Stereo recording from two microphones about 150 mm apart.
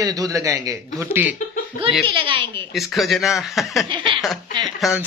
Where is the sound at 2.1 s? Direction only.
35° right (ahead or behind).